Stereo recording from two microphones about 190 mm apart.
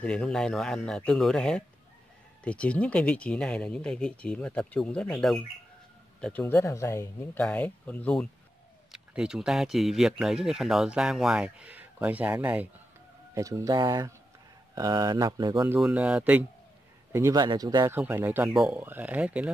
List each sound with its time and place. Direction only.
0.0 s speech: 5° left (ahead or behind); by 15.6 s 25° right (ahead or behind)
15.6 s speech: 5° right (ahead or behind)
17.1 s speech: 15° right (ahead or behind)